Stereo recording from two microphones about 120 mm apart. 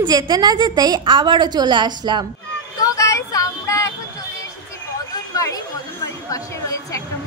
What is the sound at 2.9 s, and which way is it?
Child singing, 25° left (ahead or behind).